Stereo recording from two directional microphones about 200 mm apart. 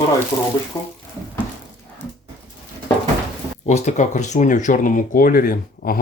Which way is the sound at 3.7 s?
35° left (ahead or behind).